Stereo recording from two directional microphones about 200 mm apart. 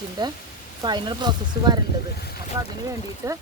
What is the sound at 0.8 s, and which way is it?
Speech, 20° right (ahead or behind).